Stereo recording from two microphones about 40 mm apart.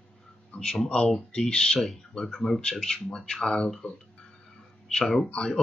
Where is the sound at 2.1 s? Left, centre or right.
Centre.